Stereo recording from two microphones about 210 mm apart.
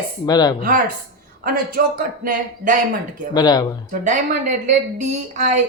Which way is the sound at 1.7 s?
40° right (ahead or behind).